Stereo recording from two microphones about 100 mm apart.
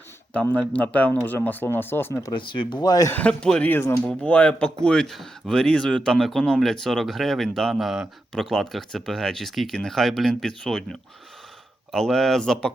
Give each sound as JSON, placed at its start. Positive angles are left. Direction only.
{"t": 0.3, "sound": "a man's voice", "side_deg": 15}
{"t": 2.3, "sound": "speech", "side_deg": 55}
{"t": 3.2, "sound": "a man's voice", "side_deg": 10}
{"t": 3.7, "sound": "speech", "side_deg": 25}
{"t": 4.1, "sound": "speech", "side_deg": 10}